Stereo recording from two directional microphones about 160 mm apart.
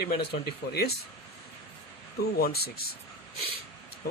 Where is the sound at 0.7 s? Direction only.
85° left.